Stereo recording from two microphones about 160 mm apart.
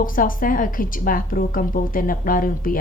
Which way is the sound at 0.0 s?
60° left (ahead or behind).